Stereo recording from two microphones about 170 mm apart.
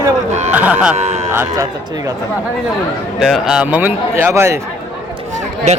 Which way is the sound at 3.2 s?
5° right (ahead or behind).